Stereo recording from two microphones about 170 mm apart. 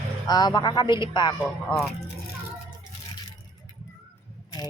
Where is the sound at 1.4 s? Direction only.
Centre (ahead or behind).